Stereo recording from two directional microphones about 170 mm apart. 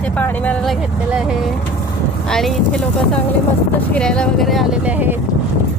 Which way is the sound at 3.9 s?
5° left (ahead or behind).